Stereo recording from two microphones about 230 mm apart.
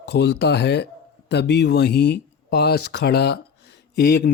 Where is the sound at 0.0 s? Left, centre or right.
Left.